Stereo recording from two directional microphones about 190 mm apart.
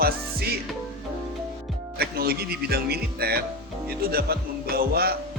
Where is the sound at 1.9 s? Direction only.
55° right (ahead or behind).